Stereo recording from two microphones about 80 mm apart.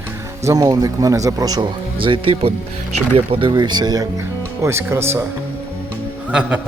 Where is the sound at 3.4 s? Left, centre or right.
Right.